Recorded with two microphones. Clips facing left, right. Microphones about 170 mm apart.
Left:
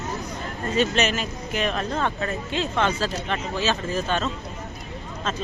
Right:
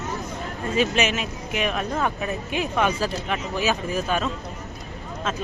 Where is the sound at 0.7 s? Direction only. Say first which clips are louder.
Even; 5° right (ahead or behind).